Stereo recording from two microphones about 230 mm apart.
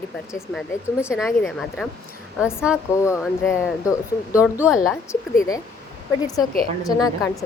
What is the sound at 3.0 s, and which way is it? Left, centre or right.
Speech, centre.